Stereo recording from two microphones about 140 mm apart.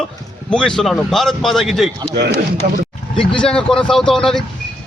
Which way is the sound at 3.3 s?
5° left (ahead or behind).